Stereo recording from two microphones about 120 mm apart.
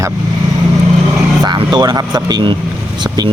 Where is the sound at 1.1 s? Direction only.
15° right (ahead or behind).